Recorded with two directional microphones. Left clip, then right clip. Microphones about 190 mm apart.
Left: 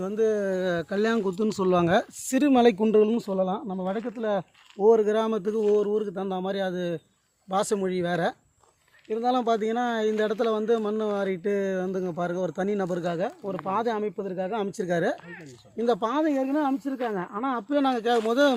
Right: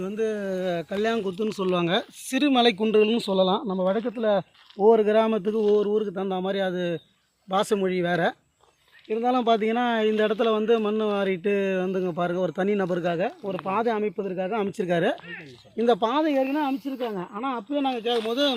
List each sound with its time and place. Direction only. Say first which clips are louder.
0.0 s speech: left 3 dB; 20° left (ahead or behind); by 2.7 s 35° left (ahead or behind)
2.8 s speech: even; 25° left (ahead or behind)
3.2 s speech: right 5 dB; 40° right (ahead or behind); by 6.8 s 15° right (ahead or behind)
7.6 s speech: right 3 dB; 30° right (ahead or behind)
15.9 s speech: right 2 dB; 15° right (ahead or behind)
17.3 s speech: left 3 dB; 20° left (ahead or behind)